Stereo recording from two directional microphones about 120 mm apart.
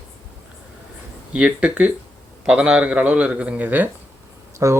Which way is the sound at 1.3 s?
10° right (ahead or behind).